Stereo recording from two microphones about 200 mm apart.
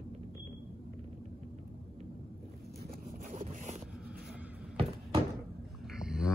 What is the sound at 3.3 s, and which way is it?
Boat, 40° right (ahead or behind).